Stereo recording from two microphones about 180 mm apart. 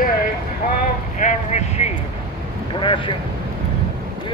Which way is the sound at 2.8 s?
30° left (ahead or behind).